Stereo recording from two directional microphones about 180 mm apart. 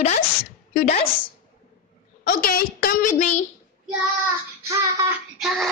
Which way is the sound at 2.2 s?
55° left (ahead or behind).